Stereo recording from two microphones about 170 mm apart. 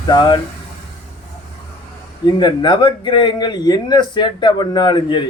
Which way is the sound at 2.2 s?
25° left (ahead or behind).